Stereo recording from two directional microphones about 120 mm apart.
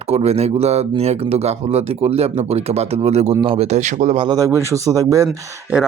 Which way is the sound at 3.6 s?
75° right (ahead or behind).